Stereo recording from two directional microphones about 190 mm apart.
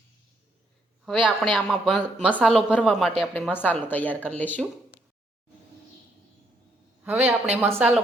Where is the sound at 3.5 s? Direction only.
10° left (ahead or behind).